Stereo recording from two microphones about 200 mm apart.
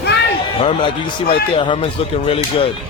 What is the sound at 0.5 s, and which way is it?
Speech, 30° left (ahead or behind).